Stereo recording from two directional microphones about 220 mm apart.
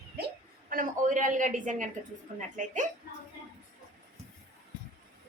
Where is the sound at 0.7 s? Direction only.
35° right (ahead or behind).